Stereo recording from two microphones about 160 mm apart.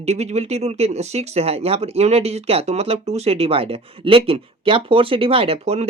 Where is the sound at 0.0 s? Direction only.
45° right (ahead or behind).